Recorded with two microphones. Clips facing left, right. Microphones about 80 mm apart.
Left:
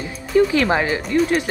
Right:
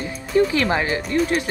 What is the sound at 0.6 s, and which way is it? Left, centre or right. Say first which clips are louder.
Speech: left 2 dB; centre.